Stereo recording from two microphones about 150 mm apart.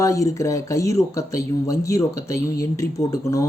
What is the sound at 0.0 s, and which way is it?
Speech, 20° left (ahead or behind).